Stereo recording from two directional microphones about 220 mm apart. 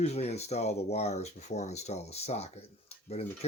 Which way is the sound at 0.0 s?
30° left (ahead or behind).